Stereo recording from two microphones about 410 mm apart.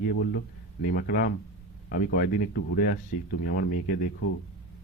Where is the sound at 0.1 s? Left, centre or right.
Left.